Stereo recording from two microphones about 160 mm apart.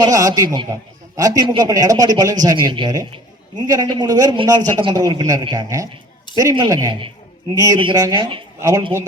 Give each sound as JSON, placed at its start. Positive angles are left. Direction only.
{"t": 0.0, "sound": "a man's voice", "side_deg": -20}